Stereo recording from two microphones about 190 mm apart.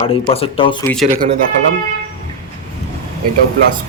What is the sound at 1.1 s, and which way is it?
Speech, 40° right (ahead or behind).